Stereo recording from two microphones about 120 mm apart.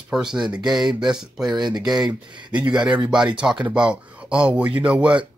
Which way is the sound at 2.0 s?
40° right (ahead or behind).